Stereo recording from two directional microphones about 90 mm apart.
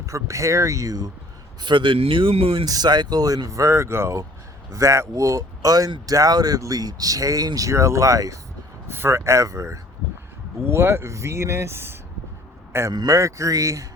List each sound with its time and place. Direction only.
0.0 s speech: 35° right (ahead or behind)
1.6 s speech: 65° right (ahead or behind); by 2.6 s 90° right
2.6 s speech: 50° right (ahead or behind); by 11.9 s 25° right (ahead or behind)
12.9 s speech: 50° right (ahead or behind)
13.1 s speech: 35° right (ahead or behind)